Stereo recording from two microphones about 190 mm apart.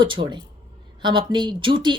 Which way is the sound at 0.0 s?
25° right (ahead or behind).